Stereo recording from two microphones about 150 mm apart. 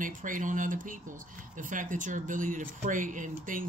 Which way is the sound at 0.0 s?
60° right (ahead or behind).